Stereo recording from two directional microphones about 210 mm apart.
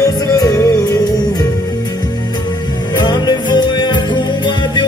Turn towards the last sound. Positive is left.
turn(degrees=20)  # may be behind; listen again after turning